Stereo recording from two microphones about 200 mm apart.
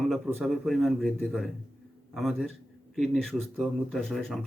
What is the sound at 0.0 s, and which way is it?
A man's voice, centre (ahead or behind).